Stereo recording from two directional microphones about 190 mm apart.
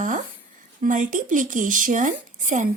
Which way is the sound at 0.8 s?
40° right (ahead or behind).